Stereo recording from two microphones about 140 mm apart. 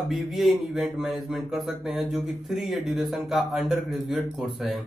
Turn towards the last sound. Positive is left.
turn(degrees=0)  # may be behind; listen again after turning